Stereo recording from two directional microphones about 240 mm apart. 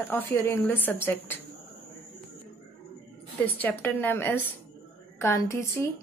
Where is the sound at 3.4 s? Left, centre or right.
Centre.